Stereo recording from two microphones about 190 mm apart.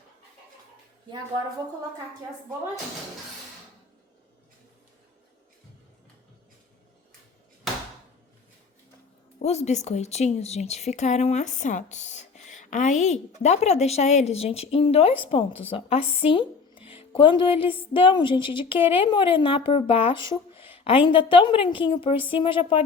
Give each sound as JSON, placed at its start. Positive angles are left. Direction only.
{"t": 9.4, "sound": "a woman's voice", "side_deg": 35}
{"t": 20.2, "sound": "a sound", "side_deg": 25}
{"t": 20.7, "sound": "speech", "side_deg": 30}